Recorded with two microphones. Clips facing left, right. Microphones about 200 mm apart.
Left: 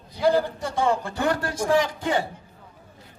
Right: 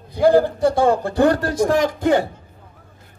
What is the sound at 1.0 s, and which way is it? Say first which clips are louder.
A man's voice: right 8 dB; 35° right (ahead or behind).